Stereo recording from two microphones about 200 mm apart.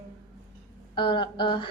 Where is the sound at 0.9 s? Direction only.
25° left (ahead or behind).